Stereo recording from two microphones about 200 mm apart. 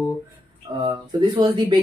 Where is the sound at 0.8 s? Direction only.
25° right (ahead or behind).